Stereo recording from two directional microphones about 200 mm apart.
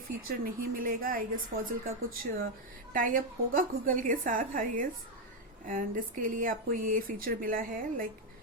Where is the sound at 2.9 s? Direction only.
45° right (ahead or behind).